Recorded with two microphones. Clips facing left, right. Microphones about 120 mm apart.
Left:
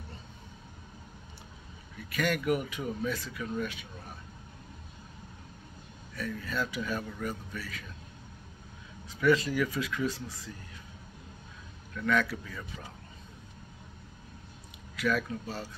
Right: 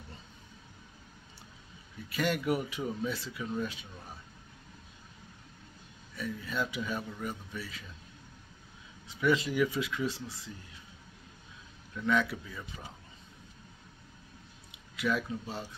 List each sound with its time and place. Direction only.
2.1 s speech: 25° right (ahead or behind)
6.1 s speech: 20° right (ahead or behind)
9.1 s speech: 20° right (ahead or behind)
11.9 s speech: 20° right (ahead or behind)
15.0 s speech: 20° right (ahead or behind)